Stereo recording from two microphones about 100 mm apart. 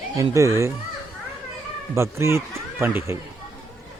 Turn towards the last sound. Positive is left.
turn(degrees=-25)  # may be behind; listen again after turning